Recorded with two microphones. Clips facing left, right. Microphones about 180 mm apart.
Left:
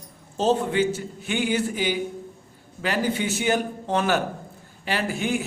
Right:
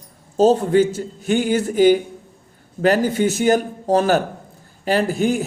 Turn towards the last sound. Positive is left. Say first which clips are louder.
# right 7 dB
turn(degrees=-40)  # may be behind; listen again after turning